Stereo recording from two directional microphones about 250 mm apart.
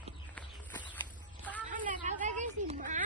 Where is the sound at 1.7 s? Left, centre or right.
Right.